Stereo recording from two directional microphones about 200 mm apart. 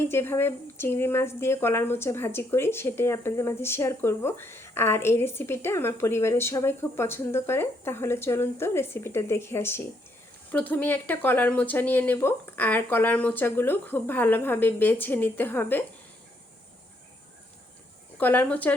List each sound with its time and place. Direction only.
0.0 s speech: 10° left (ahead or behind)
18.2 s speech: 10° left (ahead or behind)